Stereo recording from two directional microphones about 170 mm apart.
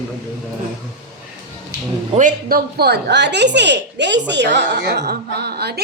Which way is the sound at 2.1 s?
55° right (ahead or behind).